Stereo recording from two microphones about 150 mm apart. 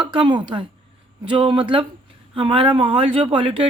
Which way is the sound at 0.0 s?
35° right (ahead or behind).